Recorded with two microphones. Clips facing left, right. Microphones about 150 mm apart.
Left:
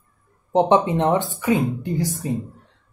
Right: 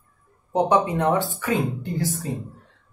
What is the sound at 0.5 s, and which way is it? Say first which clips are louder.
A woman's voice: left 3 dB; 25° left (ahead or behind).